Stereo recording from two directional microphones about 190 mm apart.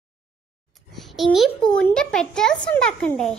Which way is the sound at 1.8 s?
5° left (ahead or behind).